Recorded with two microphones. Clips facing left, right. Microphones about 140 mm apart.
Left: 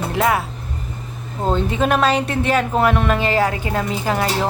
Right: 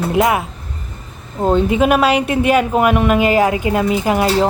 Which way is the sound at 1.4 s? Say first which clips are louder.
Right 5 dB; 10° right (ahead or behind).